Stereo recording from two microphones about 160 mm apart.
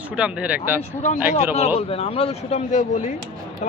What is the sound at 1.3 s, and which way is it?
Speech, 45° left (ahead or behind).